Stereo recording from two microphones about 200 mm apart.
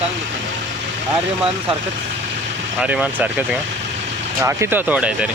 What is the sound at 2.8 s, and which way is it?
Speech, 5° right (ahead or behind).